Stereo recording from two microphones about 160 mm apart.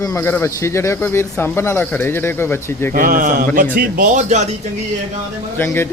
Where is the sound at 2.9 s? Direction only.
60° right (ahead or behind).